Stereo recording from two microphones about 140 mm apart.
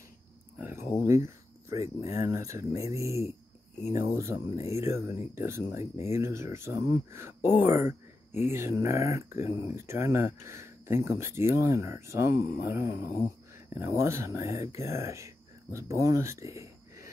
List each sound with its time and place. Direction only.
1.0 s speech: 20° right (ahead or behind)
12.6 s mantra: 15° right (ahead or behind)
13.7 s speech: 20° right (ahead or behind)